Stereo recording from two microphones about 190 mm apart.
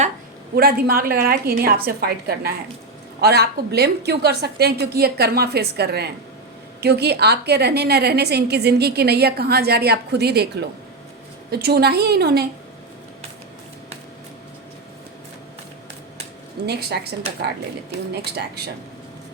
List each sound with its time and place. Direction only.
0.5 s a woman's voice: 50° right (ahead or behind)
16.6 s a woman's voice: 60° right (ahead or behind)